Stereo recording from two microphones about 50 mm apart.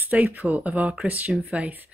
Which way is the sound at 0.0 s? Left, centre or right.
Right.